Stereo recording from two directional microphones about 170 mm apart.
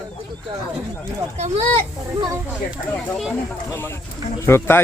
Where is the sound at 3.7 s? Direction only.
15° left (ahead or behind).